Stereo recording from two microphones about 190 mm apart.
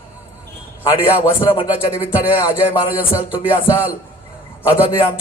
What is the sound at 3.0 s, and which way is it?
Speech, 10° right (ahead or behind).